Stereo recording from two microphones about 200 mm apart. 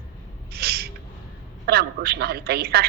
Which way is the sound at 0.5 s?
50° right (ahead or behind).